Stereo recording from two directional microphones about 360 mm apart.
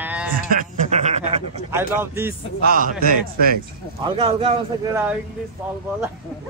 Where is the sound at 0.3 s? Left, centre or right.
Right.